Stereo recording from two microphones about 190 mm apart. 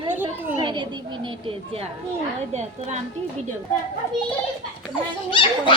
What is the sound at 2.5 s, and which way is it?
Speech, 35° right (ahead or behind).